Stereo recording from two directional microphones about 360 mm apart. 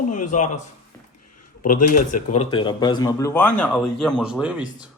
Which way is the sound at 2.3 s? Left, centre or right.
Centre.